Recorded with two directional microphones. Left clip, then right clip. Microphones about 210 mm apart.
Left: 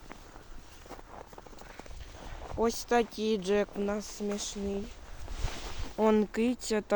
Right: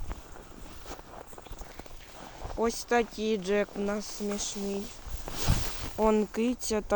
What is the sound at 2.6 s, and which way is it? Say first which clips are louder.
Speech: right 1 dB; centre (ahead or behind).